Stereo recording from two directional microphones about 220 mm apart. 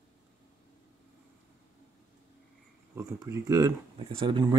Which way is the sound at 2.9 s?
15° right (ahead or behind).